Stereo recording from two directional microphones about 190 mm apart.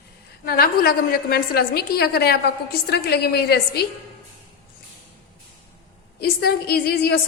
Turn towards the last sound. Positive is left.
turn(degrees=55)  # may be behind; listen again after turning